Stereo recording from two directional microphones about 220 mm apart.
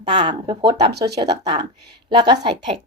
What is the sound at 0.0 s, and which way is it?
Speech, 20° right (ahead or behind).